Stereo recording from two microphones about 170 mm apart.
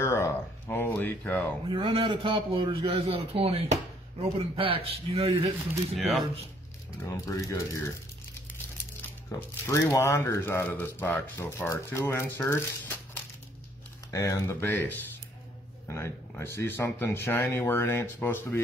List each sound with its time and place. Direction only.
0.0 s a sound: 15° left (ahead or behind)
1.7 s speech: 35° right (ahead or behind)
5.9 s speech: centre (ahead or behind)
7.1 s speech: 20° left (ahead or behind)
9.3 s speech: 20° left (ahead or behind)